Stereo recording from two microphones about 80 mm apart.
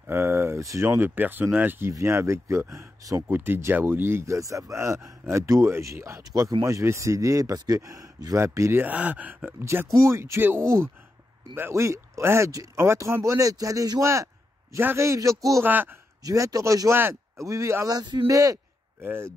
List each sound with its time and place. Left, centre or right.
0.0 s speech: right
0.8 s speech: right
1.9 s a man's voice: right
8.7 s speech: right
9.9 s speech: right
15.6 s speech: right
16.3 s a man's voice: right
17.8 s a man's voice: right
19.0 s speech: right